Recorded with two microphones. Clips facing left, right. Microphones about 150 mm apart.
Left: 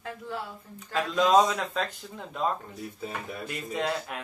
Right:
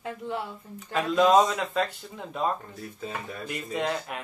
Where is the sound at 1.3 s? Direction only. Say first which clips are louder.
Left 1 dB; 15° right (ahead or behind).